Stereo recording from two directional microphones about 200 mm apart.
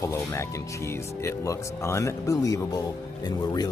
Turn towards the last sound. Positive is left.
turn(degrees=20)  # may be behind; listen again after turning